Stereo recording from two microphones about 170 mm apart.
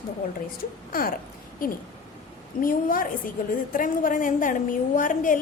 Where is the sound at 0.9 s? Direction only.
60° left (ahead or behind).